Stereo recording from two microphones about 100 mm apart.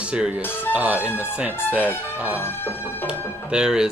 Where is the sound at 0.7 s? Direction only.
15° right (ahead or behind).